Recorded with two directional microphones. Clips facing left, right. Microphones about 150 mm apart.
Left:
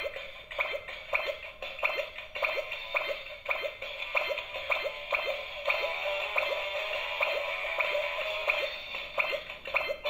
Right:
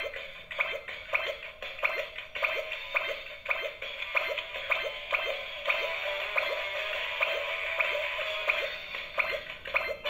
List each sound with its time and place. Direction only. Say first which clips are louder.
1.8 s music: left 1 dB; 20° left (ahead or behind)